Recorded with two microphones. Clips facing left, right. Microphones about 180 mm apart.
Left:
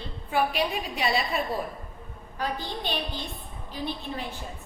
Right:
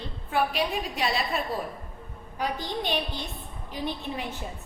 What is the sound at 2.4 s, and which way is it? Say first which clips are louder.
A woman's voice: right 1 dB; 15° right (ahead or behind).